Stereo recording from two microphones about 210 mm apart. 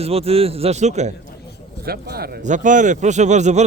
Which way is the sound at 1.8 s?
45° right (ahead or behind).